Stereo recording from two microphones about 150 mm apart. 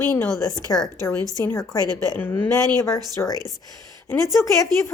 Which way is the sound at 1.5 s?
15° left (ahead or behind).